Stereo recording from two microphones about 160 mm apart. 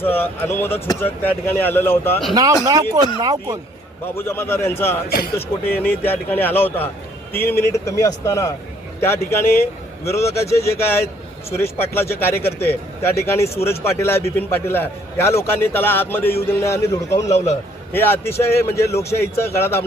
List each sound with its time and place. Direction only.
0.0 s a man's voice: 10° left (ahead or behind)
2.3 s speech: 20° right (ahead or behind)
4.0 s a man's voice: 15° left (ahead or behind)
5.0 s speech: 70° left (ahead or behind)
5.4 s a man's voice: 10° left (ahead or behind)
17.2 s a man's voice: 45° left (ahead or behind)
17.9 s a man's voice: 15° left (ahead or behind)